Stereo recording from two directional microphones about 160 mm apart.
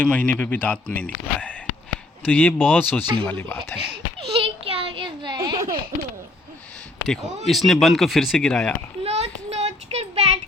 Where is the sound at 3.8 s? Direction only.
35° right (ahead or behind).